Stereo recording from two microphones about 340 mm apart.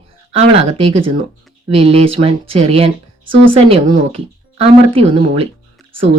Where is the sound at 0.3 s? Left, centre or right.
Centre.